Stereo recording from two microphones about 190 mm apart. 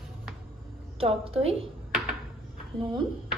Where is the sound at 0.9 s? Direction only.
30° right (ahead or behind).